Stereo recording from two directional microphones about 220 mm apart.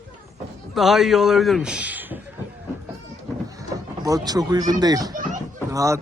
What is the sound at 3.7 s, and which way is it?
Speech, 15° right (ahead or behind).